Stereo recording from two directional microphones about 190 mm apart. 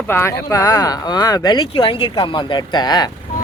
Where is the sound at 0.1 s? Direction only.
15° left (ahead or behind).